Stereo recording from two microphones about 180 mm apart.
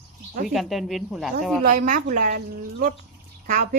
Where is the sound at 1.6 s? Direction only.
45° right (ahead or behind).